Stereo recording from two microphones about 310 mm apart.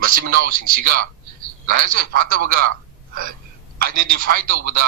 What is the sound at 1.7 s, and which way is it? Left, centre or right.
Speech, right.